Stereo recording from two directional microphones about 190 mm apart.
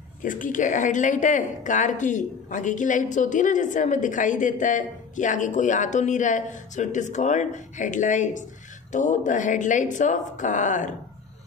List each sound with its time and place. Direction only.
0.2 s speech: 45° left (ahead or behind)